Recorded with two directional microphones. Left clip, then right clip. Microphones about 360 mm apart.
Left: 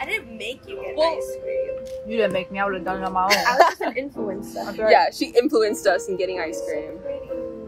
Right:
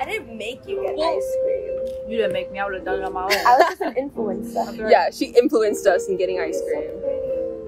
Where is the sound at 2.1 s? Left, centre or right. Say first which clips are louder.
Left 1 dB; left.